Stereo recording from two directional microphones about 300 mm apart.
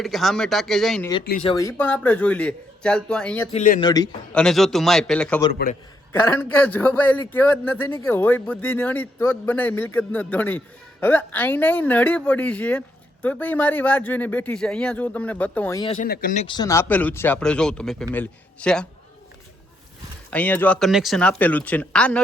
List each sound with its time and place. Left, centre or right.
0.0 s a man's voice: centre
3.5 s speech: left
3.8 s a man's voice: centre
16.0 s a man's voice: left; by 18.9 s centre
20.3 s a man's voice: centre